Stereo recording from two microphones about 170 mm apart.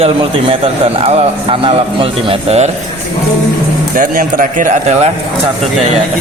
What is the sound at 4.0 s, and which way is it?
Speech, 55° right (ahead or behind).